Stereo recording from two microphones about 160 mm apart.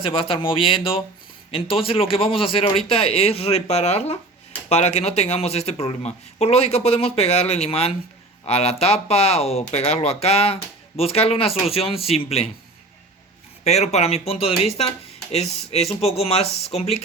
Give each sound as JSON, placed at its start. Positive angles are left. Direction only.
{"t": 0.0, "sound": "speech", "side_deg": 35}
{"t": 13.7, "sound": "speech", "side_deg": 45}